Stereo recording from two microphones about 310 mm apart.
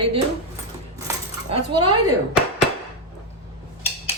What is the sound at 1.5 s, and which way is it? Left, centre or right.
Speech, centre.